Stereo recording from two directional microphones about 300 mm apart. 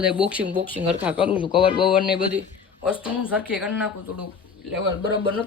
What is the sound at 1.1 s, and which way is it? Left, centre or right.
Speech, centre.